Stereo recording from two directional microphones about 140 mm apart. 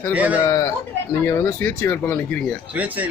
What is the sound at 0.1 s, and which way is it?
Speech, 10° right (ahead or behind).